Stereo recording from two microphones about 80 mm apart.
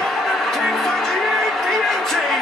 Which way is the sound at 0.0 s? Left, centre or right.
Centre.